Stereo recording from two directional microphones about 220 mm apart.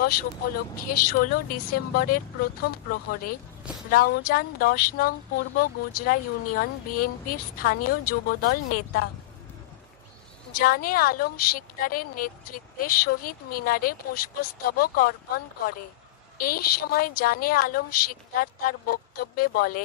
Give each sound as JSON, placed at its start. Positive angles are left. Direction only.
{"t": 0.0, "sound": "a woman's voice", "side_deg": 45}
{"t": 7.9, "sound": "speech", "side_deg": 90}
{"t": 8.3, "sound": "speech", "side_deg": 45}
{"t": 10.5, "sound": "a woman's voice", "side_deg": 40}